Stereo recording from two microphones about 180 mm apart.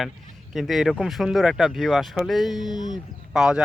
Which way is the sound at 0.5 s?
Centre (ahead or behind).